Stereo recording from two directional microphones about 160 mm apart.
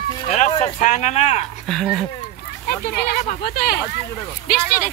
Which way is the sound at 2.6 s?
75° left (ahead or behind).